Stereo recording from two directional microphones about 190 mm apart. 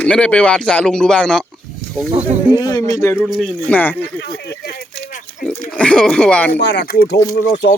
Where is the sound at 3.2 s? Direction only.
Centre (ahead or behind).